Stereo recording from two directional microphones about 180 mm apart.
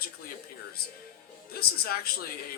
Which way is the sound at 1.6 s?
60° left (ahead or behind).